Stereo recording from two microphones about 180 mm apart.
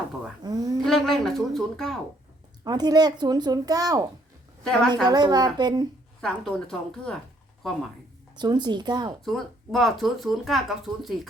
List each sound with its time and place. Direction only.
0.4 s a sound: 20° right (ahead or behind)
0.9 s speech: centre (ahead or behind)
2.6 s speech: 20° right (ahead or behind)
4.6 s speech: 5° left (ahead or behind)
5.0 s speech: 25° right (ahead or behind)
6.2 s speech: 5° left (ahead or behind)
8.4 s speech: 25° right (ahead or behind)
9.2 s speech: centre (ahead or behind)